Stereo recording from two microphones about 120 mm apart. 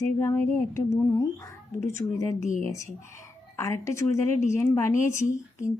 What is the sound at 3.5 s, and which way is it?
Speech, 25° left (ahead or behind).